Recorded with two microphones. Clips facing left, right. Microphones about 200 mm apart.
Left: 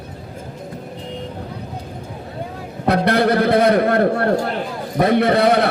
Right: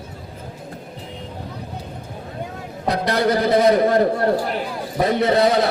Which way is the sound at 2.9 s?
60° left (ahead or behind).